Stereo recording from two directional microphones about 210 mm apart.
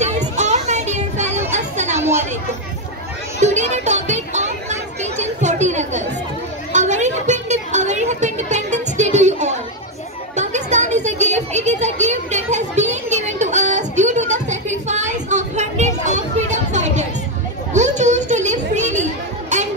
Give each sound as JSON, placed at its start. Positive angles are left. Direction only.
{"t": 0.4, "sound": "children playing", "side_deg": -35}
{"t": 2.0, "sound": "chatter", "side_deg": -10}
{"t": 3.3, "sound": "children playing", "side_deg": -35}
{"t": 6.7, "sound": "a sound", "side_deg": -35}
{"t": 19.5, "sound": "children playing", "side_deg": -35}